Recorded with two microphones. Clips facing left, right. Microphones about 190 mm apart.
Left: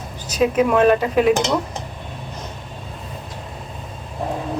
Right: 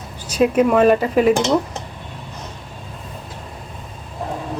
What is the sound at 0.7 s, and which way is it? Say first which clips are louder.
Speech: right 1 dB; centre (ahead or behind).